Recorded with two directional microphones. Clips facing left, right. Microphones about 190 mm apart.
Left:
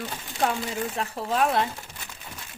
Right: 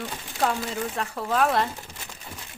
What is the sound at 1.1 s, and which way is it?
Speech, 25° left (ahead or behind).